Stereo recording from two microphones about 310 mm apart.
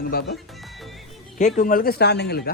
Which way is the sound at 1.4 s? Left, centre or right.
Left.